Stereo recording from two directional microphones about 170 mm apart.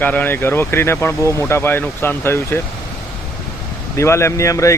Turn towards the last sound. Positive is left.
turn(degrees=20)  # may be behind; listen again after turning